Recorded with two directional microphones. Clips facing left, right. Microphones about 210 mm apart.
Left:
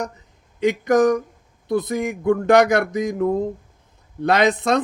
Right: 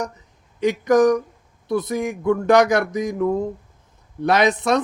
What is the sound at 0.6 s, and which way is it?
Speech, 55° left (ahead or behind).